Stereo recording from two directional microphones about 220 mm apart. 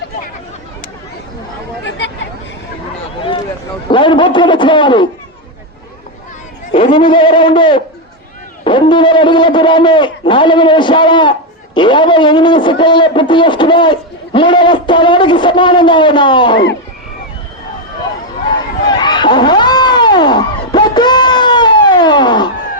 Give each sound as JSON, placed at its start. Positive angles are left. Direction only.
{"t": 3.8, "sound": "a man's voice", "side_deg": 20}
{"t": 6.7, "sound": "a man's voice", "side_deg": 25}
{"t": 18.9, "sound": "a sound", "side_deg": 20}